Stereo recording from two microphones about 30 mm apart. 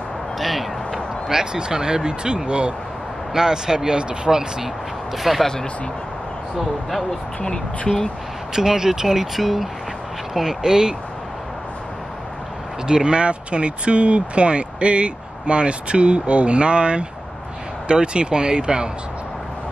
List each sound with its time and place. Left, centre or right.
0.4 s a sound: centre
1.3 s speech: right
3.3 s speech: right
5.1 s speech: centre
8.5 s speech: centre
10.6 s speech: right
12.8 s speech: right